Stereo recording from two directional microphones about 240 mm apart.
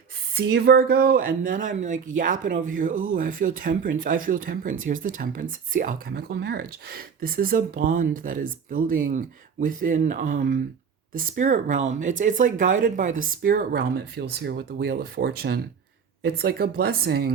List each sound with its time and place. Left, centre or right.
0.3 s speech: right